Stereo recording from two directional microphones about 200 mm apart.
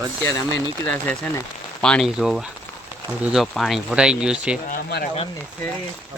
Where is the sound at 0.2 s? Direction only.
15° left (ahead or behind); by 4.5 s 5° right (ahead or behind).